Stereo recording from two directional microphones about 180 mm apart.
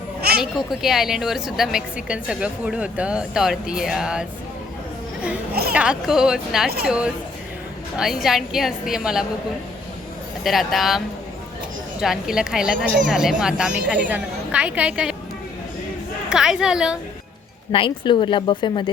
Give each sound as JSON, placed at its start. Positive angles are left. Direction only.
{"t": 0.5, "sound": "a woman's voice", "side_deg": 0}
{"t": 5.7, "sound": "a woman's voice", "side_deg": -5}
{"t": 10.4, "sound": "a woman's voice", "side_deg": 0}
{"t": 16.3, "sound": "a woman's voice", "side_deg": -5}
{"t": 17.7, "sound": "speech", "side_deg": 30}